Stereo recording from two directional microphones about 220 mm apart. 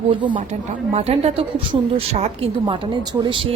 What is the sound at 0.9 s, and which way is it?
A woman's voice, 30° right (ahead or behind).